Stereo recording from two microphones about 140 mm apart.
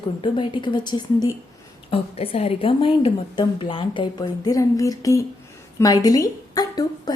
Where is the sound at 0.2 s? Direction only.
35° left (ahead or behind).